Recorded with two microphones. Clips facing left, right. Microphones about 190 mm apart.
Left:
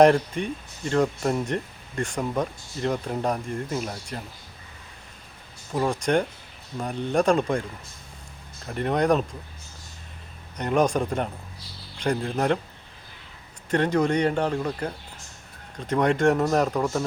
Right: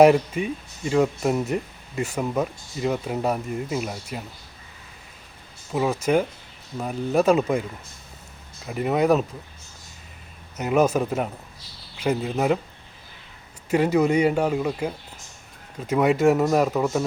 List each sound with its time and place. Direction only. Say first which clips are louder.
0.0 s speech: right 2 dB; 5° right (ahead or behind)
5.7 s speech: right 2 dB; 5° right (ahead or behind)
8.6 s speech: right 2 dB; 5° right (ahead or behind)
10.6 s speech: right 2 dB; 5° right (ahead or behind)
13.7 s speech: right 3 dB; 5° right (ahead or behind)